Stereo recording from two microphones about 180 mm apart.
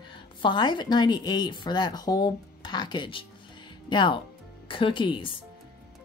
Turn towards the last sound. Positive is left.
turn(degrees=25)  # may be behind; listen again after turning